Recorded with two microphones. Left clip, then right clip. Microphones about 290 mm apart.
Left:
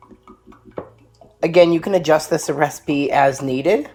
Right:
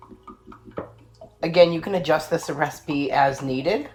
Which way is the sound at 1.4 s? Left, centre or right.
Left.